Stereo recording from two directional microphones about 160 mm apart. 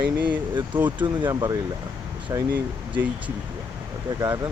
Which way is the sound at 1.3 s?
25° right (ahead or behind).